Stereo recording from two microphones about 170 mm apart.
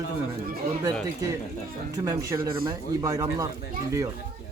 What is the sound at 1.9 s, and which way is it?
A man's voice, 20° right (ahead or behind).